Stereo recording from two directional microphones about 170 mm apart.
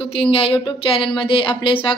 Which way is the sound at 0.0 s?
35° left (ahead or behind).